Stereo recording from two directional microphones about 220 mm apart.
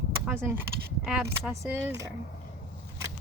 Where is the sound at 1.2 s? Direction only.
10° right (ahead or behind).